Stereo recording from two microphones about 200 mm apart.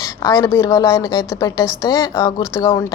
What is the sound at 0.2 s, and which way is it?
Speech, 20° left (ahead or behind).